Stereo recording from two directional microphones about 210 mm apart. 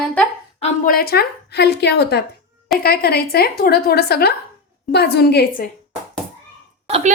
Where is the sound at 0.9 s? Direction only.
45° left (ahead or behind).